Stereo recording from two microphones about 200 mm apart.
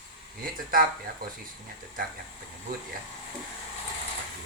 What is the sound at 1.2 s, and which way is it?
Speech, 45° right (ahead or behind).